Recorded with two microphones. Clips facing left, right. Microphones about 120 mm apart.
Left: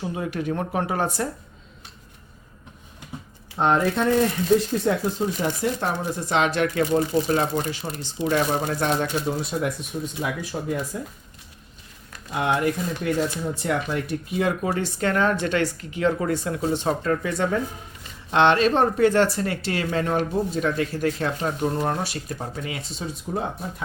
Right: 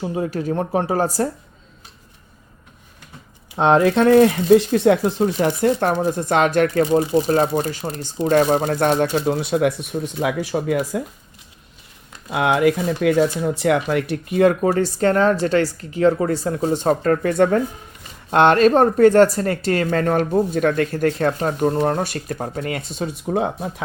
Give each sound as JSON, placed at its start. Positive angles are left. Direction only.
{"t": 0.0, "sound": "speech", "side_deg": -30}
{"t": 3.6, "sound": "speech", "side_deg": -90}
{"t": 9.2, "sound": "speech", "side_deg": -75}
{"t": 12.3, "sound": "speech", "side_deg": -90}
{"t": 13.9, "sound": "speech", "side_deg": -65}